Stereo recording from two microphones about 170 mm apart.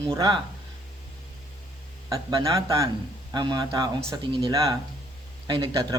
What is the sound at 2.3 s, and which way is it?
Speech, 35° right (ahead or behind).